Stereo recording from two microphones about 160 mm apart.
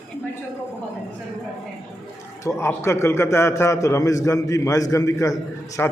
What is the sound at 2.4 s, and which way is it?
A man's voice, 20° left (ahead or behind).